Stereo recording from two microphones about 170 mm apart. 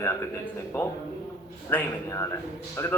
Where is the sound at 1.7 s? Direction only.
10° left (ahead or behind).